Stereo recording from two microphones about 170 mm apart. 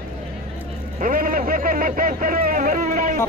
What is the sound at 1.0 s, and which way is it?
Speech, 55° right (ahead or behind).